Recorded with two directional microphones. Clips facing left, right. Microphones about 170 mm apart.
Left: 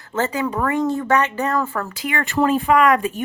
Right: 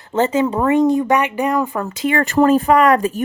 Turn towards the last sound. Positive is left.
turn(degrees=-40)  # may be behind; listen again after turning